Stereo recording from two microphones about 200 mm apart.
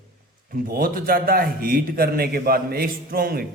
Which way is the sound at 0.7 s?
45° right (ahead or behind).